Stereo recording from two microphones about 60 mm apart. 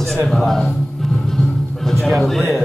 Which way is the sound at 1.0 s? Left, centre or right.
Centre.